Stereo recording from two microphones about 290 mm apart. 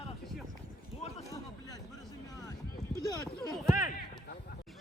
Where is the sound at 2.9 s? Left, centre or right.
Centre.